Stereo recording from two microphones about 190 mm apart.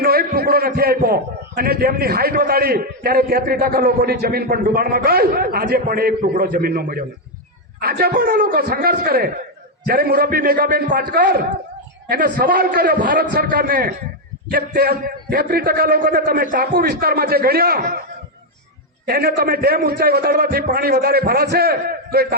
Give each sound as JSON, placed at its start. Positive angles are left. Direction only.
{"t": 0.0, "sound": "a man's voice", "side_deg": -55}
{"t": 19.0, "sound": "a man's voice", "side_deg": -55}